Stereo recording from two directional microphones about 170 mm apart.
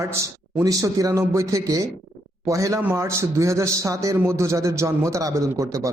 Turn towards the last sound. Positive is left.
turn(degrees=-20)  # may be behind; listen again after turning